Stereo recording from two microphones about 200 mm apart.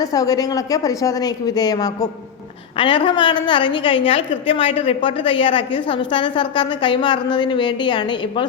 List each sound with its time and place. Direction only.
0.0 s a woman's voice: 15° left (ahead or behind)